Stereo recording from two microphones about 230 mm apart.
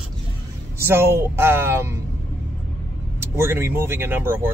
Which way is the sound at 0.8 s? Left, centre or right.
Centre.